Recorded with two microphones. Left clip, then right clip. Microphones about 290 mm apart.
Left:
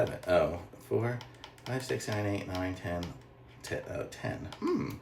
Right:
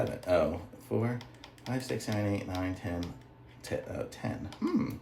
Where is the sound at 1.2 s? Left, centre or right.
Centre.